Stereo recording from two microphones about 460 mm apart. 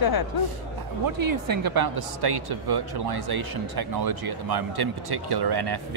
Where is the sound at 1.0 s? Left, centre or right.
Right.